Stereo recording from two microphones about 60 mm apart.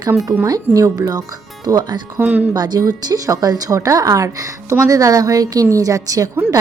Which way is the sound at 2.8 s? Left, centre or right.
Right.